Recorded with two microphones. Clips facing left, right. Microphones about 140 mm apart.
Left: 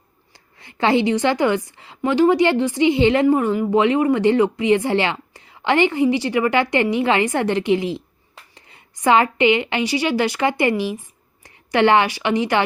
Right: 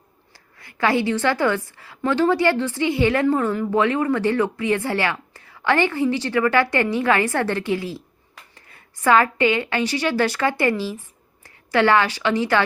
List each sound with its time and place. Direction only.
0.3 s a woman's voice: 20° left (ahead or behind)